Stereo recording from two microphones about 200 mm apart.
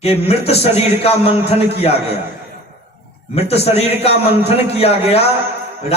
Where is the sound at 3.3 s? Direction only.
30° left (ahead or behind).